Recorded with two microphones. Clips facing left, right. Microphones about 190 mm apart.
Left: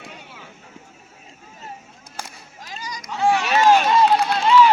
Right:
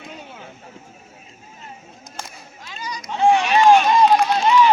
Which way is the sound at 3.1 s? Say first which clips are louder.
Right 3 dB; 20° right (ahead or behind).